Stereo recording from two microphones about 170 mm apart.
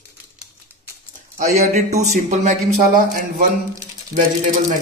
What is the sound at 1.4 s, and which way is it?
A man's voice, 50° right (ahead or behind).